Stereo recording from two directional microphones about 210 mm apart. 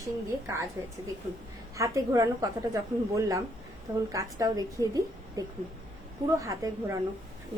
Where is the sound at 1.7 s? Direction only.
15° right (ahead or behind).